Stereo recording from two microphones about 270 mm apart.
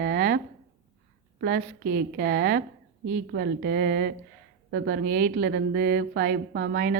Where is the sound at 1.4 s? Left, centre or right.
Right.